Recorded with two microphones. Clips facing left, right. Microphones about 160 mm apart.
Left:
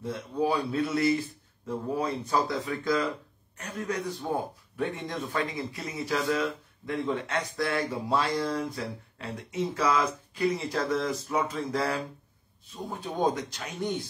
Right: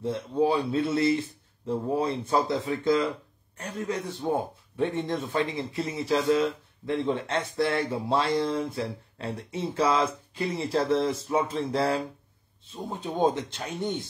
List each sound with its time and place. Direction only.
0.0 s speech: 25° right (ahead or behind)